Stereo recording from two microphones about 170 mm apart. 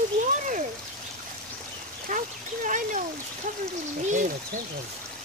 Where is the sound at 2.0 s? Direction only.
50° right (ahead or behind).